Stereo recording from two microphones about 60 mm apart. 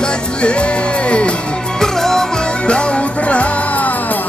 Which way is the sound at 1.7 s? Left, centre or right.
Centre.